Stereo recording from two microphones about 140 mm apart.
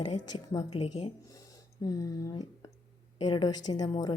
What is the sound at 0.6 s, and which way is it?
Speech, 45° left (ahead or behind).